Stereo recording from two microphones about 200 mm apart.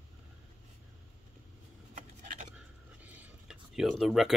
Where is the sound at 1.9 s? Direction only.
35° right (ahead or behind).